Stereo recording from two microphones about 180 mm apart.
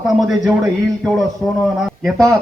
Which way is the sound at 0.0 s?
Centre (ahead or behind).